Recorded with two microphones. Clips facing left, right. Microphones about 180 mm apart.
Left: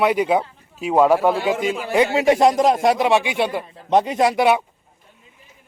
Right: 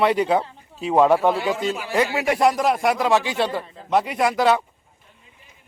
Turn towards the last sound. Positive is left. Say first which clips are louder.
# left 2 dB
turn(degrees=15)  # may be behind; listen again after turning